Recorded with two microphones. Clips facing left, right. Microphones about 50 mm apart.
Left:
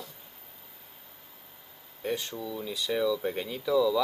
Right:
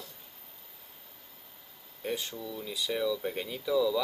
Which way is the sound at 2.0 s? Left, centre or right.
Centre.